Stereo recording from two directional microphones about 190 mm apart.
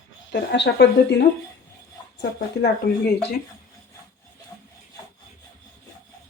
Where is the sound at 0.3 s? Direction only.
65° left (ahead or behind).